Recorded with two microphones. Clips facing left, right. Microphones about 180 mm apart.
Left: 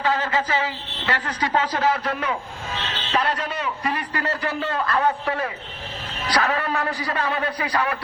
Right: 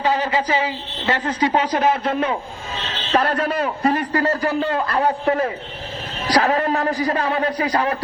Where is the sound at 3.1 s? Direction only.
50° right (ahead or behind).